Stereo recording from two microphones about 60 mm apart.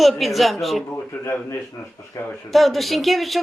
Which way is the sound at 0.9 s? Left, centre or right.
Left.